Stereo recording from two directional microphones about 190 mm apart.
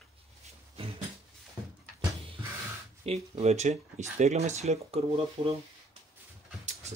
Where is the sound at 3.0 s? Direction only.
35° right (ahead or behind).